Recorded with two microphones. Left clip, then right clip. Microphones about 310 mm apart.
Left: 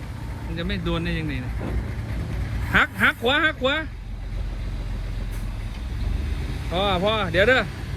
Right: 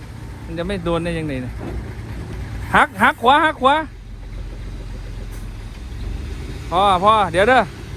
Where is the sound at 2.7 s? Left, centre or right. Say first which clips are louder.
Right 5 dB; centre.